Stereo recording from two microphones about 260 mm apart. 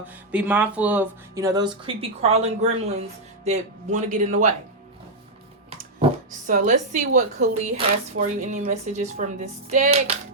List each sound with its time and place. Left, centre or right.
0.0 s speech: centre; by 4.5 s right
6.5 s speech: right